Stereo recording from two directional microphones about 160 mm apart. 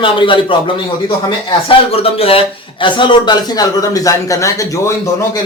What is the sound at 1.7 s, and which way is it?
A man's voice, 35° left (ahead or behind).